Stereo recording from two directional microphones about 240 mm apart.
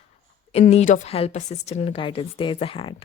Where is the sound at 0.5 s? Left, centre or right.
Left.